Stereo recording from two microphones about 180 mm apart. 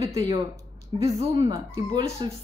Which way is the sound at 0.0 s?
20° right (ahead or behind).